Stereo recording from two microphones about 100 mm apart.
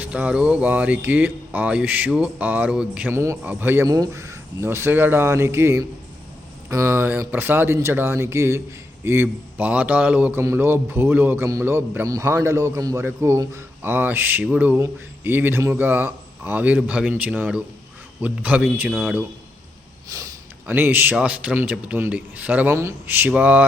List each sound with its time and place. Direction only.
0.0 s speech: 15° right (ahead or behind)
3.1 s speech: 25° right (ahead or behind)
3.4 s speech: 15° right (ahead or behind)
3.8 s speech: 40° right (ahead or behind); by 12.0 s 20° right (ahead or behind)
12.0 s speech: 35° right (ahead or behind); by 18.6 s 15° right (ahead or behind)
18.9 s speech: centre (ahead or behind)
20.7 s speech: 20° right (ahead or behind)